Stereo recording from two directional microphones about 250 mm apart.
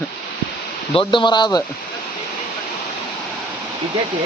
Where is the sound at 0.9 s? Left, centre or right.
Centre.